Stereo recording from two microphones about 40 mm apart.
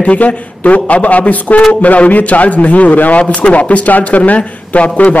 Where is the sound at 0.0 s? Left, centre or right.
Left.